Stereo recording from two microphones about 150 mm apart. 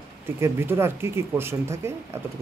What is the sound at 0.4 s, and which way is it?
Speech, 15° right (ahead or behind).